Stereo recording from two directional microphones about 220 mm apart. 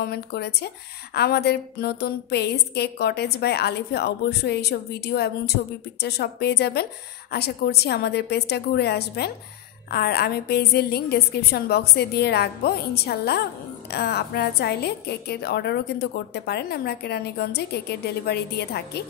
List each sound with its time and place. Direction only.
0.0 s a woman's voice: 45° left (ahead or behind)